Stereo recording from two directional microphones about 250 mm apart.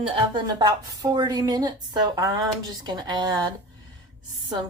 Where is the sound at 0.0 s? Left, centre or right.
Right.